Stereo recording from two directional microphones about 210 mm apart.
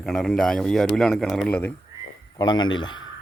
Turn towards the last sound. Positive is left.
turn(degrees=20)  # may be behind; listen again after turning